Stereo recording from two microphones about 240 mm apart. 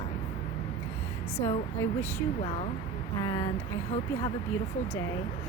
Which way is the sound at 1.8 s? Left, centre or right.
Centre.